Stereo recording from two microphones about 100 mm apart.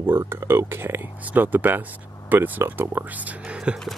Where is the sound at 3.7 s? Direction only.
10° right (ahead or behind).